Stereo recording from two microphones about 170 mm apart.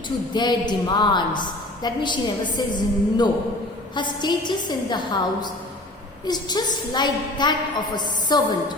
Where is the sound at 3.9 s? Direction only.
25° left (ahead or behind).